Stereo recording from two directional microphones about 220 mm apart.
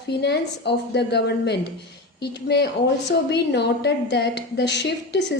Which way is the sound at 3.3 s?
50° left (ahead or behind).